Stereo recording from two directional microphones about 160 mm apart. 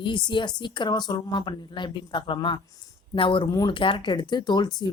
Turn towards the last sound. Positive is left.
turn(degrees=25)  # may be behind; listen again after turning